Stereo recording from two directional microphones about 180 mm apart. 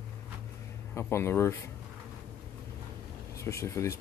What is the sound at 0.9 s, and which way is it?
Speech, 15° left (ahead or behind).